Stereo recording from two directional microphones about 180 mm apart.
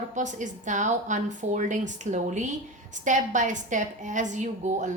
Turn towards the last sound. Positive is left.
turn(degrees=-45)  # may be behind; listen again after turning